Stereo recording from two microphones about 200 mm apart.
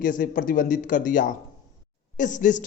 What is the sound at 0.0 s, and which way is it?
A man's voice, 45° left (ahead or behind).